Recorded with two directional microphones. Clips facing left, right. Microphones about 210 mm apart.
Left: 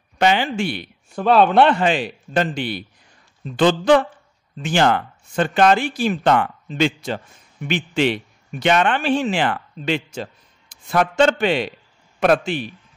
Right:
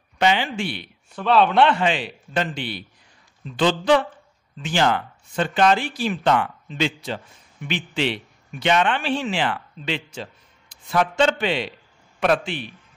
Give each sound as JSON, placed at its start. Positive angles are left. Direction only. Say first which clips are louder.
{"t": 0.2, "sound": "a man's voice", "louder": "left 3 dB", "side_deg": 45}